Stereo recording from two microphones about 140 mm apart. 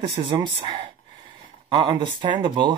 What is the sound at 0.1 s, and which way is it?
Speech, 40° right (ahead or behind).